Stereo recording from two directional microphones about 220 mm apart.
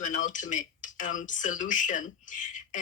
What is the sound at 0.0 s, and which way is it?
Speech, 35° left (ahead or behind).